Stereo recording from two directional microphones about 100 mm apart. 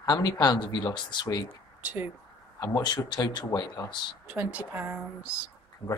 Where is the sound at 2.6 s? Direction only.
40° left (ahead or behind).